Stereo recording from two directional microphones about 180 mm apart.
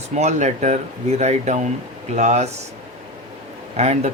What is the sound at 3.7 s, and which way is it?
Speech, 40° right (ahead or behind).